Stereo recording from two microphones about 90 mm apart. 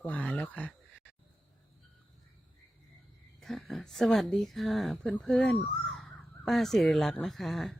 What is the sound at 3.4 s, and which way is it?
A woman's voice, centre (ahead or behind).